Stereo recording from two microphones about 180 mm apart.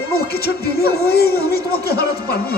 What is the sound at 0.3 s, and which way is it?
Speech, 60° left (ahead or behind).